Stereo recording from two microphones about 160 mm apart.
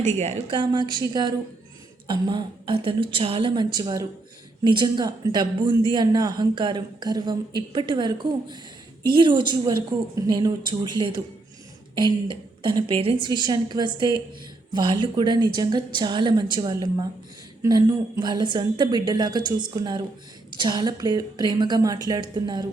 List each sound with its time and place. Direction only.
0.0 s a woman's voice: 45° right (ahead or behind)
0.5 s a woman's voice: 30° right (ahead or behind)